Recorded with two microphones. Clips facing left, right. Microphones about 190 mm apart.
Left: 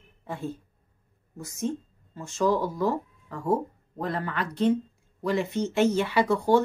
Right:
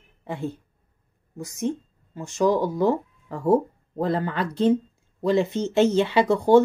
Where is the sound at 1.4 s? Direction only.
15° right (ahead or behind).